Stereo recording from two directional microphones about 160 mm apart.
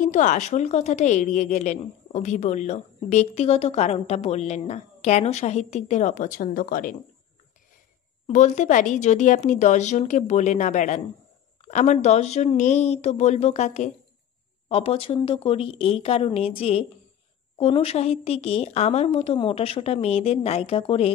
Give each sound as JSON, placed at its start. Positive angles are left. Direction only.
{"t": 0.0, "sound": "a woman's voice", "side_deg": 50}
{"t": 8.3, "sound": "a woman's voice", "side_deg": 50}